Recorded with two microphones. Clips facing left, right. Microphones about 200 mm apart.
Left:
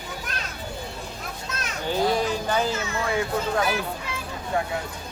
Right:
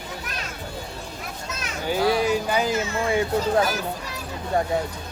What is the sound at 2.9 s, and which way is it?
Speech, 35° right (ahead or behind).